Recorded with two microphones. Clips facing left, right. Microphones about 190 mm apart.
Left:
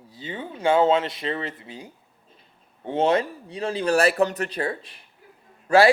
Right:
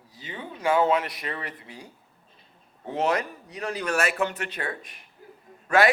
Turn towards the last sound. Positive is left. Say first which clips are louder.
# left 4 dB
turn(degrees=30)  # may be behind; listen again after turning